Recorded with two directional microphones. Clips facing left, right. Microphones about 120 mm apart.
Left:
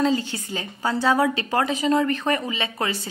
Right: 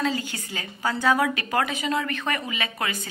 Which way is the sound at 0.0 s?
30° left (ahead or behind).